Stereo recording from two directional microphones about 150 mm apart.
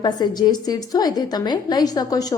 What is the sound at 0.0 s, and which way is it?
A woman's voice, 25° left (ahead or behind).